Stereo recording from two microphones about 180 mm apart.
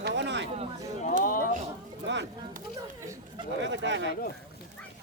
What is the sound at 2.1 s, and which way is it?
Speech, 80° right.